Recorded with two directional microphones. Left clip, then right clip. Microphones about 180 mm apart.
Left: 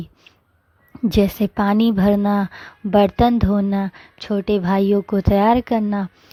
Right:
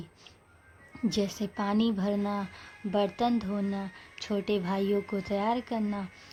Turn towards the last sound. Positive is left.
turn(degrees=50)  # may be behind; listen again after turning